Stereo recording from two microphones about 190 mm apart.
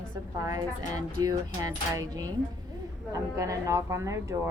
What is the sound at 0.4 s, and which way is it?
Speech, 20° right (ahead or behind).